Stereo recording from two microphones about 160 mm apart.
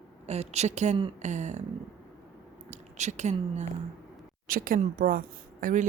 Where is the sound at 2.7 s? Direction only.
45° right (ahead or behind).